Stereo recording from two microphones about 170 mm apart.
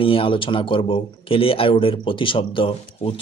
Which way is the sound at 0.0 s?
30° left (ahead or behind).